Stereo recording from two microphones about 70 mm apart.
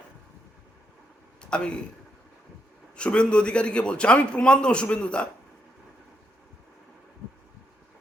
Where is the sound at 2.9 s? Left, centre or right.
Centre.